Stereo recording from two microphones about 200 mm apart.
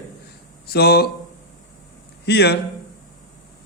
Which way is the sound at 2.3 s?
55° left (ahead or behind).